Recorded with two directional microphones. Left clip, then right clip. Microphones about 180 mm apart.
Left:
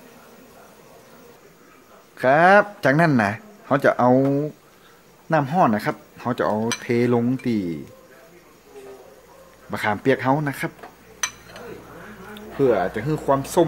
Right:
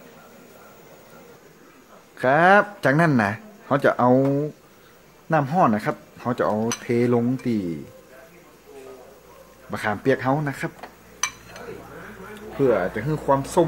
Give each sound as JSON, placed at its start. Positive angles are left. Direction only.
{"t": 2.1, "sound": "speech", "side_deg": 10}
{"t": 9.7, "sound": "speech", "side_deg": 15}
{"t": 12.5, "sound": "speech", "side_deg": 20}